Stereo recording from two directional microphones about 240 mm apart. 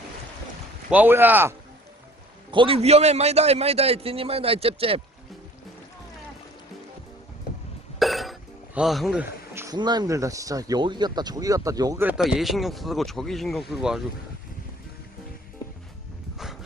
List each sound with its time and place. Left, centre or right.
0.9 s speech: centre
2.5 s a man's voice: right
7.9 s speech: centre